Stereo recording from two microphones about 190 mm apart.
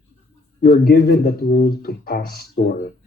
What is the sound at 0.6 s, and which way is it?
Speech, 55° left (ahead or behind).